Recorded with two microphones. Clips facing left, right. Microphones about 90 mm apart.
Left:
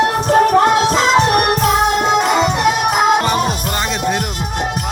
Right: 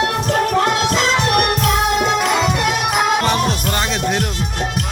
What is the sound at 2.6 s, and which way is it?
Music, 5° left (ahead or behind).